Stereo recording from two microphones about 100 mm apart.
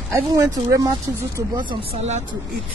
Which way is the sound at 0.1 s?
35° right (ahead or behind).